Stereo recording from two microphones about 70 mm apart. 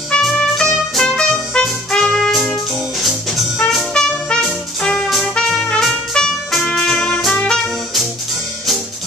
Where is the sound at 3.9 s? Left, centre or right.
Centre.